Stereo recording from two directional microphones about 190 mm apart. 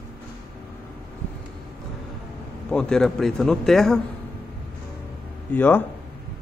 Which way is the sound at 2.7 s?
5° left (ahead or behind).